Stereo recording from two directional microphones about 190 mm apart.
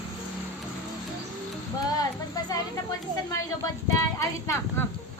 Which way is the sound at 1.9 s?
20° left (ahead or behind).